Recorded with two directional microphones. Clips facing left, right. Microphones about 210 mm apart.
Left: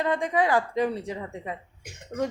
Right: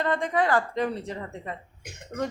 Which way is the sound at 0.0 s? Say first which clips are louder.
Left 1 dB; 10° left (ahead or behind).